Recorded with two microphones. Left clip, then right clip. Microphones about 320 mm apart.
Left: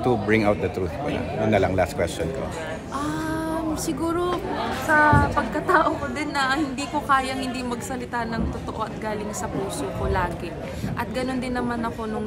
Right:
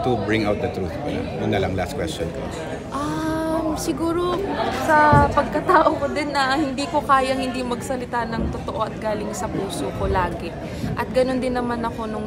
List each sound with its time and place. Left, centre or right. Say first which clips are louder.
0.0 s speech: even; centre
3.3 s a sound: right 4 dB; centre
4.9 s a woman's voice: right 3 dB; centre
11.0 s a woman's voice: right 7 dB; centre